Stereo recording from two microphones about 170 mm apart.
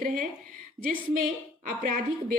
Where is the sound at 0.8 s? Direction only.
50° right (ahead or behind).